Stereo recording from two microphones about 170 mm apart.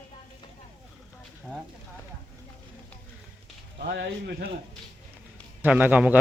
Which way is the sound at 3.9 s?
75° right (ahead or behind).